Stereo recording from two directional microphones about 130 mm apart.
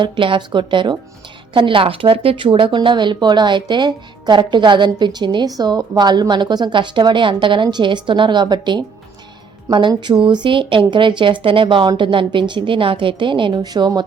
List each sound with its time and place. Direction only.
0.0 s speech: 40° right (ahead or behind)